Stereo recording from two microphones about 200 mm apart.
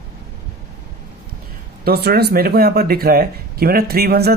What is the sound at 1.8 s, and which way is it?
Speech, 50° right (ahead or behind).